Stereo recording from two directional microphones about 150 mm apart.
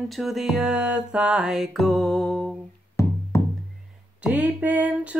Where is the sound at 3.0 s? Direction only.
20° left (ahead or behind).